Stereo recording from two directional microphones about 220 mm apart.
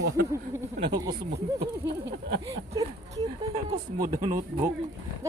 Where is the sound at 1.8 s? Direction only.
50° right (ahead or behind).